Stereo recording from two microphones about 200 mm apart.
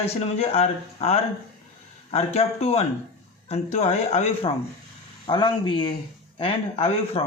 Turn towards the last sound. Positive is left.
turn(degrees=30)  # may be behind; listen again after turning